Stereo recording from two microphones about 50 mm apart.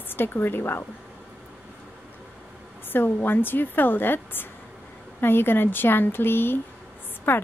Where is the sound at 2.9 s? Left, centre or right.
Left.